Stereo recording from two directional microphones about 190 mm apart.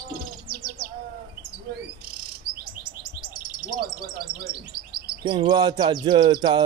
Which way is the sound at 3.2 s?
50° right (ahead or behind).